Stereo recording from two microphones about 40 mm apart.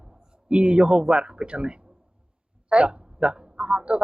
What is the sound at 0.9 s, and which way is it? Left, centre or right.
Speech, centre.